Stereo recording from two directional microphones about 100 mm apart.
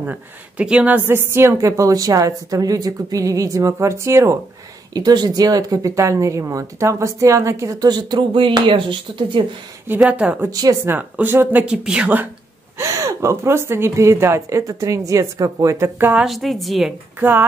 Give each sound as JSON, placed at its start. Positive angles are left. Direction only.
{"t": 0.0, "sound": "speech", "side_deg": -15}
{"t": 4.9, "sound": "speech", "side_deg": -45}
{"t": 9.9, "sound": "speech", "side_deg": -15}
{"t": 10.5, "sound": "speech", "side_deg": -40}
{"t": 10.9, "sound": "speech", "side_deg": -20}
{"t": 11.6, "sound": "speech", "side_deg": -10}
{"t": 12.7, "sound": "speech", "side_deg": -30}
{"t": 16.3, "sound": "a woman's voice", "side_deg": 0}
{"t": 17.2, "sound": "speech", "side_deg": -20}